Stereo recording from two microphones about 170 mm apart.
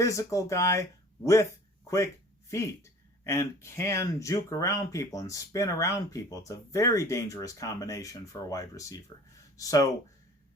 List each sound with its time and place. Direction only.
0.0 s speech: 20° left (ahead or behind)
2.5 s speech: 15° left (ahead or behind)